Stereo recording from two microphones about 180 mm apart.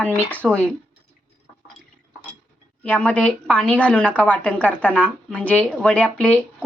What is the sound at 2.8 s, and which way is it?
A woman's voice, 10° left (ahead or behind).